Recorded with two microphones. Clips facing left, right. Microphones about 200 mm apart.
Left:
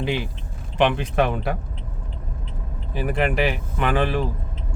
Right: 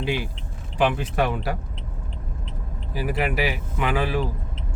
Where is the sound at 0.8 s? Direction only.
5° right (ahead or behind).